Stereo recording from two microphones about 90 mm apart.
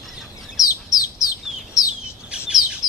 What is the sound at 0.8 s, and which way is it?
Bird, 40° left (ahead or behind).